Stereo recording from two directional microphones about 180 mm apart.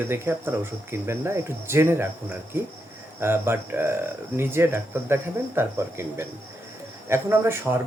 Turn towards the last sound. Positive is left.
turn(degrees=-15)  # may be behind; listen again after turning